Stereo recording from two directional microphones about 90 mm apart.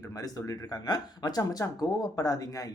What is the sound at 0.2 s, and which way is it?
Speech, 40° left (ahead or behind).